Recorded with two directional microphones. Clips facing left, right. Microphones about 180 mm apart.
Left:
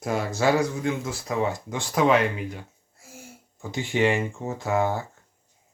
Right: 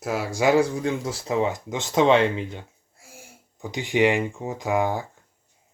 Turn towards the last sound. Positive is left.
turn(degrees=-15)  # may be behind; listen again after turning